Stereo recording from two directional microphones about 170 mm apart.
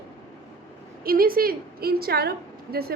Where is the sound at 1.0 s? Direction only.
60° right (ahead or behind).